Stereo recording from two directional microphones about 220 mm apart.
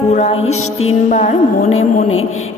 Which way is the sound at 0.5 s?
70° left (ahead or behind).